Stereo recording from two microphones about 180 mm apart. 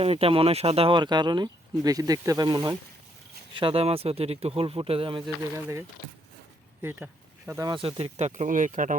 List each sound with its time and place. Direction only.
0.0 s speech: 30° right (ahead or behind)
5.5 s speech: 15° right (ahead or behind)
6.8 s speech: 10° right (ahead or behind)
7.7 s speech: 30° right (ahead or behind); by 9.0 s 45° right (ahead or behind)